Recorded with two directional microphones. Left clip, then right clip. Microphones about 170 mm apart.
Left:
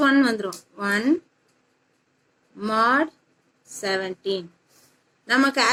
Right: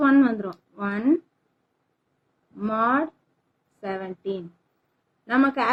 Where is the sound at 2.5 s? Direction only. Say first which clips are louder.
Left 3 dB; 15° right (ahead or behind).